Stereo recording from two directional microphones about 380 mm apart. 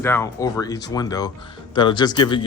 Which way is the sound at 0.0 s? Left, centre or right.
Centre.